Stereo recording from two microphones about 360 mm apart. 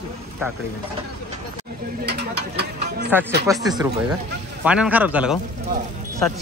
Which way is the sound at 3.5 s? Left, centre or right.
Centre.